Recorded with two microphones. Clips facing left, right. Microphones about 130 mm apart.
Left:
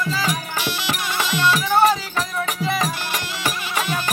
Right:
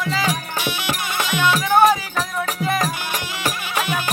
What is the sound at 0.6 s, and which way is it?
Music, 55° right (ahead or behind).